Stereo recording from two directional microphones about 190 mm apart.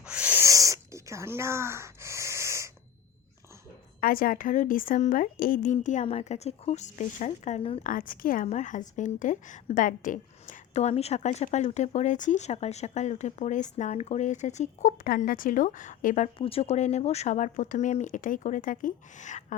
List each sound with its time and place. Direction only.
0.0 s a sound: 5° right (ahead or behind)
4.0 s a woman's voice: 50° left (ahead or behind); by 7.8 s 35° left (ahead or behind)
7.9 s a woman's voice: 45° left (ahead or behind)